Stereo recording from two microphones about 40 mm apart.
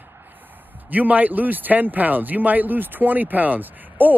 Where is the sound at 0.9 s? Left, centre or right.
Right.